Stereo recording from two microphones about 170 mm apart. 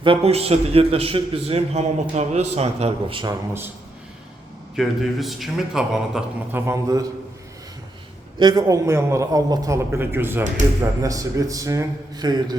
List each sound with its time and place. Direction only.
0.0 s a man's voice: 35° right (ahead or behind)
4.8 s a man's voice: centre (ahead or behind)
6.7 s a man's voice: 20° right (ahead or behind)
8.4 s a man's voice: 25° right (ahead or behind)